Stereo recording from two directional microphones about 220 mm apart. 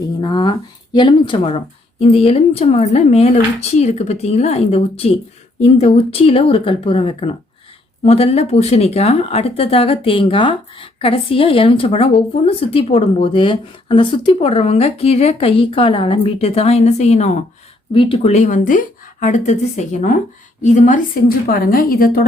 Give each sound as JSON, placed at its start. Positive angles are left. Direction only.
{"t": 0.2, "sound": "a woman's voice", "side_deg": 20}